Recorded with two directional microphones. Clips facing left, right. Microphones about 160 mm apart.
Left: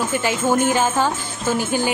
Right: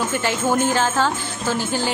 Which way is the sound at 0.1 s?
10° left (ahead or behind).